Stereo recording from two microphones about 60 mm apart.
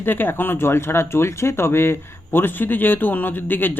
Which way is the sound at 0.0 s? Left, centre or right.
Left.